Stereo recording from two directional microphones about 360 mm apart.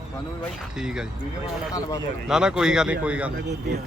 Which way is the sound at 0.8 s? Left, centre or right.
Centre.